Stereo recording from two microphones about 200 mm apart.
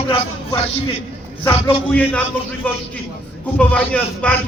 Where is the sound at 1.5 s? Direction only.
30° left (ahead or behind).